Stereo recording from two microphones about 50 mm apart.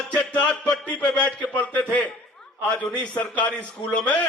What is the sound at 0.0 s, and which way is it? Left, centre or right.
Music, left.